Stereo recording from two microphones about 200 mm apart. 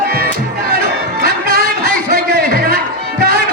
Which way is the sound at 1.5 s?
50° right (ahead or behind).